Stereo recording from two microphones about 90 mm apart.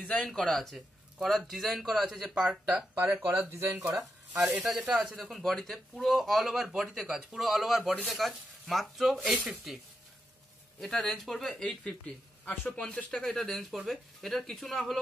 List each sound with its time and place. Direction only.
0.0 s speech: 10° left (ahead or behind); by 3.0 s 10° right (ahead or behind)
3.0 s speech: 30° right (ahead or behind)
4.6 s speech: 5° right (ahead or behind)